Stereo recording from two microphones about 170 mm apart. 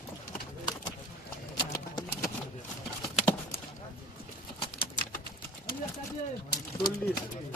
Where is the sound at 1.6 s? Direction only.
20° left (ahead or behind).